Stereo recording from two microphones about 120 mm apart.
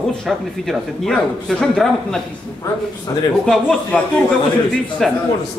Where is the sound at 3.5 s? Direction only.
5° left (ahead or behind).